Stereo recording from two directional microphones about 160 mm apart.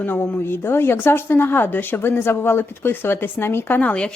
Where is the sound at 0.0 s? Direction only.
10° left (ahead or behind).